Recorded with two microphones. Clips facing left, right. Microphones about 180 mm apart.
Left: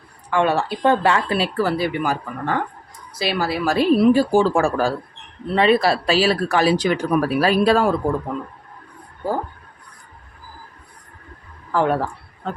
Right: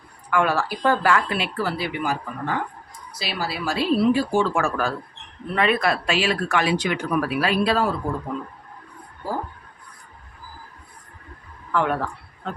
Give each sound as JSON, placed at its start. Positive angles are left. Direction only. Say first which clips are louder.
{"t": 0.3, "sound": "speech", "louder": "left 3 dB", "side_deg": 25}
{"t": 11.7, "sound": "speech", "louder": "left 4 dB", "side_deg": 35}